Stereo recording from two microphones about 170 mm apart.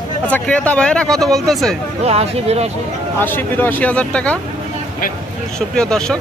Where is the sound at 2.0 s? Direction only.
35° right (ahead or behind).